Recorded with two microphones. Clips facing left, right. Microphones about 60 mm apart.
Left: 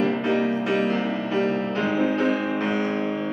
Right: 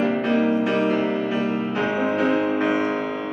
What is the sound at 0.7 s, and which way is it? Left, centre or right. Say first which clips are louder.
Music: right 2 dB; centre.